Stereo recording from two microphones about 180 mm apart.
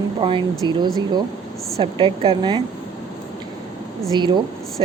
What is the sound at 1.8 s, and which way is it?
Speech, 30° right (ahead or behind).